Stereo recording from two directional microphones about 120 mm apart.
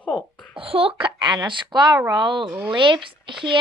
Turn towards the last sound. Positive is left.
turn(degrees=-45)  # may be behind; listen again after turning